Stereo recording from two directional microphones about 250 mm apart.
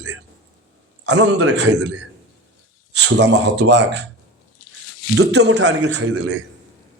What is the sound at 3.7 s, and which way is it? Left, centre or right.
Speech, right.